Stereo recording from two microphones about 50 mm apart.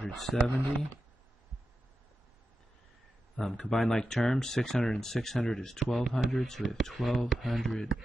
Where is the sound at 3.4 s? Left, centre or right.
Centre.